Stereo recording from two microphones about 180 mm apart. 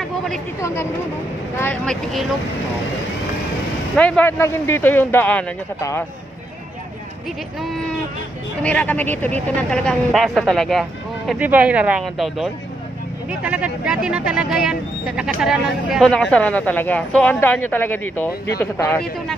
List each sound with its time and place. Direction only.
0.6 s speech: 15° left (ahead or behind)
1.6 s speech: 5° left (ahead or behind)
3.9 s speech: 5° left (ahead or behind)
8.6 s speech: 10° left (ahead or behind)